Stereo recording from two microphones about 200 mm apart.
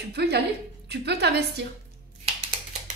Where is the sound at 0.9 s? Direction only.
55° right (ahead or behind).